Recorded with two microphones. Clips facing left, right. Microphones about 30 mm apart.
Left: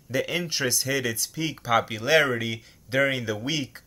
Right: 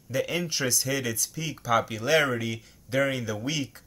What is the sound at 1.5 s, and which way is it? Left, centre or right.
Speech, left.